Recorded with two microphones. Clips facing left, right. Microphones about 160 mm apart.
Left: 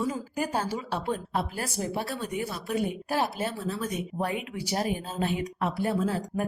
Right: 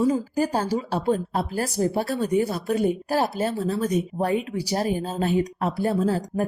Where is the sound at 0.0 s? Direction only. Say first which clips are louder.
Right 8 dB; 35° right (ahead or behind).